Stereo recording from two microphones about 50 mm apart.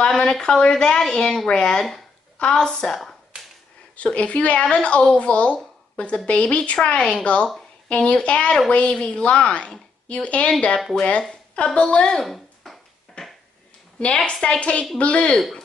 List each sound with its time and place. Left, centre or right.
0.2 s speech: centre
3.9 s speech: left
8.9 s speech: centre
12.6 s a sound: centre
13.2 s a sound: centre
13.9 s speech: left